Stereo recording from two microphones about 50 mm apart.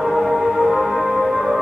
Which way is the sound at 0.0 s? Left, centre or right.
Centre.